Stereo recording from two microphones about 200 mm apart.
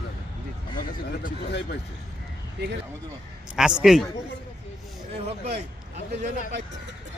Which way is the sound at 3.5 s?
5° right (ahead or behind).